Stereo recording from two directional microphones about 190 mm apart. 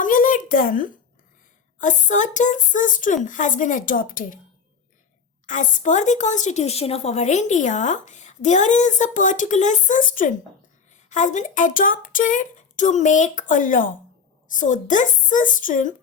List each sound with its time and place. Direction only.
0.0 s a sound: 45° left (ahead or behind)
1.8 s a woman's voice: 40° left (ahead or behind)
5.5 s a woman's voice: 40° left (ahead or behind)